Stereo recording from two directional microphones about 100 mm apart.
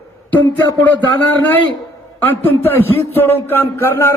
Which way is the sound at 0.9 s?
15° left (ahead or behind).